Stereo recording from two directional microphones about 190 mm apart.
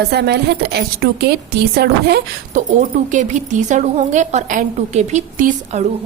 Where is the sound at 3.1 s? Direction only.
40° right (ahead or behind).